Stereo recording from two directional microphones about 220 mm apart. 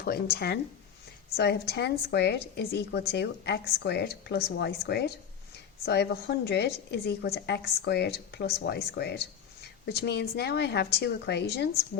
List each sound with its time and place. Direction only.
0.0 s a woman's voice: 45° left (ahead or behind)